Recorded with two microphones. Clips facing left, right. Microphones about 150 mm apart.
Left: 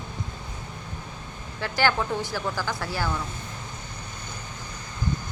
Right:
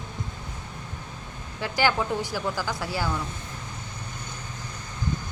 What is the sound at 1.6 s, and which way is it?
Speech, 15° right (ahead or behind).